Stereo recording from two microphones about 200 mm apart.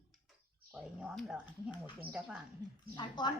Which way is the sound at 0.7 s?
5° right (ahead or behind).